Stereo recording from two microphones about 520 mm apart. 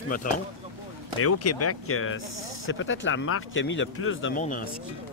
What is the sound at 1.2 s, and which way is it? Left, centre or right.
Speech, left.